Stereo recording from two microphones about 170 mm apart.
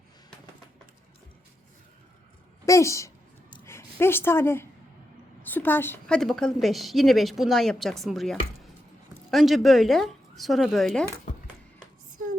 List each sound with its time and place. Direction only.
2.6 s a woman's voice: 15° left (ahead or behind); by 11.0 s centre (ahead or behind)